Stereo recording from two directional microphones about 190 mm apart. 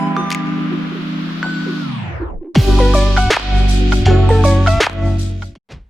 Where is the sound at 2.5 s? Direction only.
Centre (ahead or behind).